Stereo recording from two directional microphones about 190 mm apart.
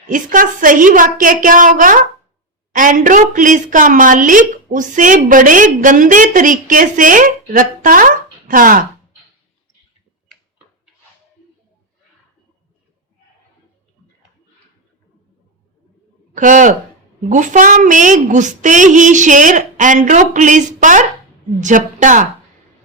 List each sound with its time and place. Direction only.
0.1 s a woman's voice: 45° right (ahead or behind)
16.3 s a man's voice: 40° right (ahead or behind)